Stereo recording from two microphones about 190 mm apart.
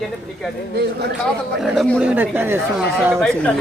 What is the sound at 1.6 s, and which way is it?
Speech, centre (ahead or behind).